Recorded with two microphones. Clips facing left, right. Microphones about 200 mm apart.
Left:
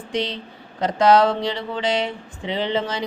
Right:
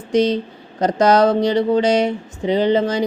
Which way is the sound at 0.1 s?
45° right (ahead or behind).